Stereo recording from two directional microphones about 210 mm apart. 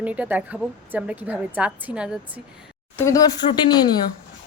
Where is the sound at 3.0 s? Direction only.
15° left (ahead or behind).